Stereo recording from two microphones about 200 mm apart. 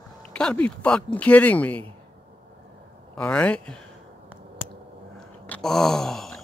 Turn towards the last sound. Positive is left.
turn(degrees=0)  # may be behind; listen again after turning